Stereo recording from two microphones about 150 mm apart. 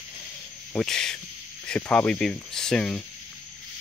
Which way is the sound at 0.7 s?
5° left (ahead or behind).